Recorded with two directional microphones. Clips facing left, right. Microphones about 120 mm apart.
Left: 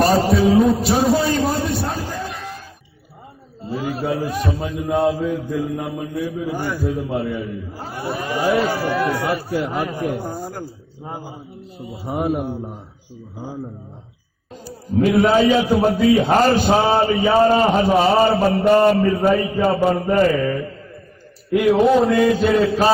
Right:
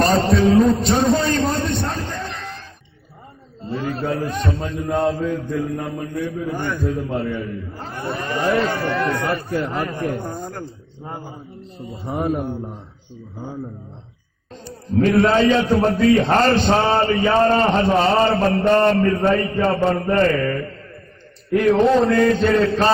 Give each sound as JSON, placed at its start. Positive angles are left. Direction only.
{"t": 0.0, "sound": "a sound", "side_deg": 10}
{"t": 3.6, "sound": "a man's voice", "side_deg": 10}
{"t": 14.5, "sound": "a man's voice", "side_deg": 5}